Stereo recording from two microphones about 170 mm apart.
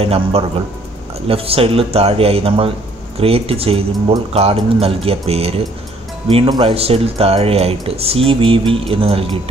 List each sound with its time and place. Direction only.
0.0 s speech: 35° right (ahead or behind)